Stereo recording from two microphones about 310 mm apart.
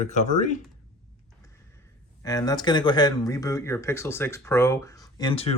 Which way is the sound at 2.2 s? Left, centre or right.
Centre.